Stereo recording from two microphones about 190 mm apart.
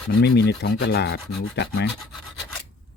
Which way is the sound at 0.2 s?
60° left (ahead or behind).